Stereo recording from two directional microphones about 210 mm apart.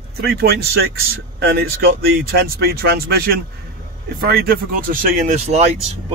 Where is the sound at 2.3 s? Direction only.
45° right (ahead or behind).